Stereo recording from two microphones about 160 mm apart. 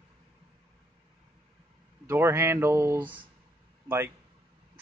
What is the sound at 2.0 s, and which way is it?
Speech, 15° right (ahead or behind).